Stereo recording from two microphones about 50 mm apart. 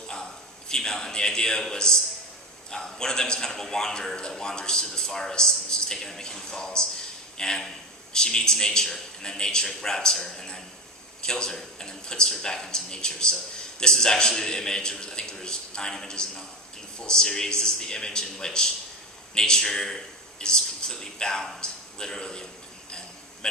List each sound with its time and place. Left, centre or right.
0.7 s a man's voice: centre